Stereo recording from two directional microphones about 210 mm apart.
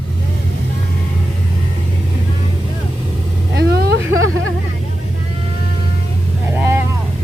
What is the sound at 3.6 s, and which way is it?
Speech, 50° right (ahead or behind).